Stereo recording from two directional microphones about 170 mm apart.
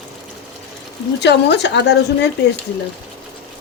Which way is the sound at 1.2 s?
80° left.